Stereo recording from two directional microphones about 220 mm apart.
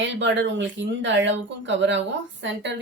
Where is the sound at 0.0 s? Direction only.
55° right (ahead or behind).